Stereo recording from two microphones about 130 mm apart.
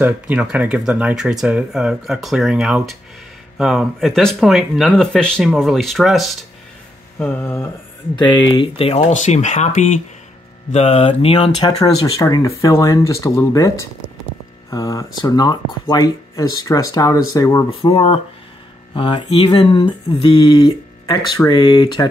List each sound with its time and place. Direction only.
0.0 s speech: 10° right (ahead or behind); by 7.4 s 10° left (ahead or behind)
8.2 s speech: 35° left (ahead or behind); by 9.8 s 65° left (ahead or behind)
10.7 s speech: 55° left (ahead or behind)
11.6 s speech: 30° left (ahead or behind)
17.6 s speech: 45° left (ahead or behind)